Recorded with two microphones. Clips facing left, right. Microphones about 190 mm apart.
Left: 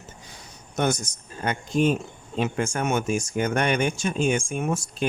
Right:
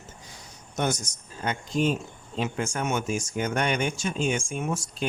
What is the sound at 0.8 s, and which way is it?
Speech, 60° left (ahead or behind).